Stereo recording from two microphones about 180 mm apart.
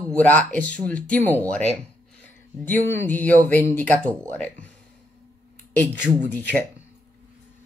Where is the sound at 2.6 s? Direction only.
10° left (ahead or behind).